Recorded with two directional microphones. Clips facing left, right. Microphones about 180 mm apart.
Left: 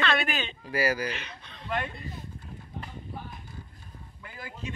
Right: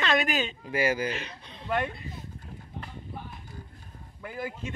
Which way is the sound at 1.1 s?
35° right (ahead or behind).